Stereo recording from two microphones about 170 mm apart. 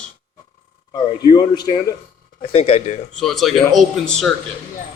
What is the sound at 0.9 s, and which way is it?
A man's voice, 25° left (ahead or behind).